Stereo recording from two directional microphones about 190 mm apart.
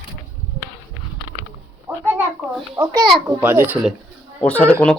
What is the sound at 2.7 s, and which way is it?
Speech, 15° right (ahead or behind).